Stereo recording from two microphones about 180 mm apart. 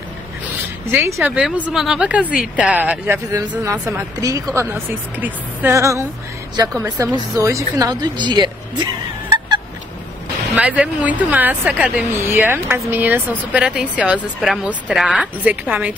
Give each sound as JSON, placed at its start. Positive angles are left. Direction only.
{"t": 0.9, "sound": "a woman's voice", "side_deg": -10}
{"t": 10.5, "sound": "a woman's voice", "side_deg": -5}